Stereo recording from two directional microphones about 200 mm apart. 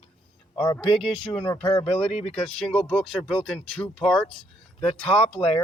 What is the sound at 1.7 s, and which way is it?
Speech, 30° left (ahead or behind).